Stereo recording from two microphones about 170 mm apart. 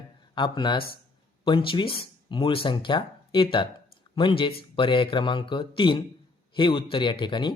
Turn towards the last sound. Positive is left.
turn(degrees=25)  # may be behind; listen again after turning